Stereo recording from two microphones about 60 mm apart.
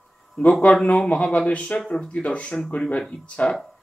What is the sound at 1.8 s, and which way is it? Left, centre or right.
Speech, centre.